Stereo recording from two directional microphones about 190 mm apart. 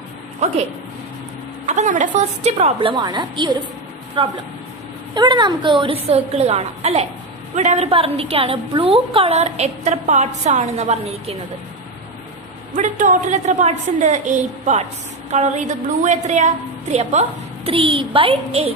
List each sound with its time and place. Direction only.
1.7 s a woman's voice: 40° right (ahead or behind)
12.7 s a woman's voice: 45° right (ahead or behind)